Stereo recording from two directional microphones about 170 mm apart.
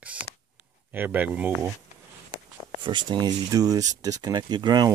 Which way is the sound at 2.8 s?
25° right (ahead or behind).